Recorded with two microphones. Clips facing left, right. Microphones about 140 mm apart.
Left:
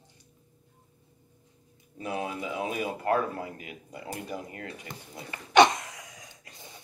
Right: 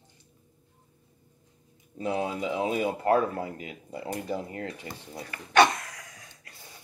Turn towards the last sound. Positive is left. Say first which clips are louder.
# left 2 dB
turn(degrees=20)  # may be behind; listen again after turning